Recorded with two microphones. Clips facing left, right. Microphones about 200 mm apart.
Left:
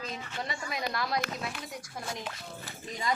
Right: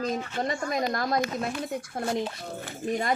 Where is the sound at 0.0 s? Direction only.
50° right (ahead or behind).